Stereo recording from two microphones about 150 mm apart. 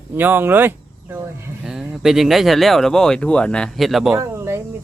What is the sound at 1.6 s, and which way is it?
Speech, 5° right (ahead or behind).